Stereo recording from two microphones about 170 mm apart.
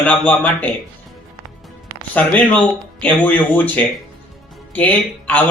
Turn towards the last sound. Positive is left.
turn(degrees=10)  # may be behind; listen again after turning